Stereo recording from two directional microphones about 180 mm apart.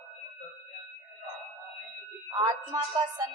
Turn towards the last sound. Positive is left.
turn(degrees=-20)  # may be behind; listen again after turning